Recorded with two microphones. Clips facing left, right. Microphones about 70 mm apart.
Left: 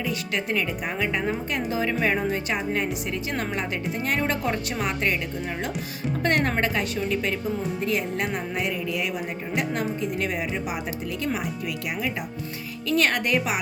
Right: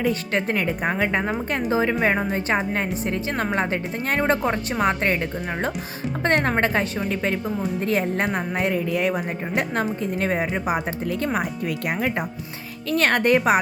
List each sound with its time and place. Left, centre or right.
0.0 s a woman's voice: right
6.2 s a woman's voice: right
7.9 s a woman's voice: right
12.9 s a woman's voice: right